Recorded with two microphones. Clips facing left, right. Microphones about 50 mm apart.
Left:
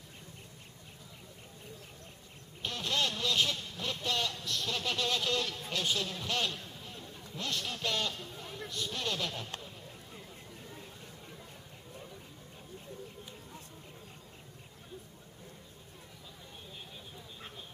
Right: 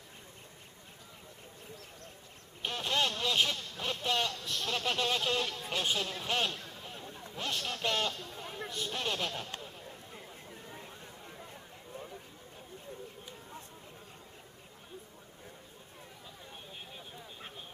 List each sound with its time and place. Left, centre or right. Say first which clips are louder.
2.6 s speech: right 2 dB; right
6.9 s a sound: right 1 dB; right
8.1 s speech: right 1 dB; centre
8.4 s speech: right 1 dB; right
9.3 s speech: right 1 dB; centre